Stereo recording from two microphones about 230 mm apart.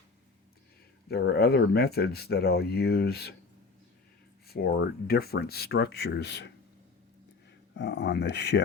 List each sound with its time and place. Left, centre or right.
1.0 s speech: left
4.4 s speech: left
7.7 s speech: left